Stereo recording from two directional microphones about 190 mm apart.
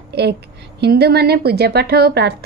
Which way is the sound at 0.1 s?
60° right (ahead or behind).